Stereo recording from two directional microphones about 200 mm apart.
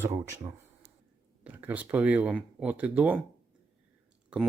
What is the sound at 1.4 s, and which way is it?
Speech, 10° right (ahead or behind).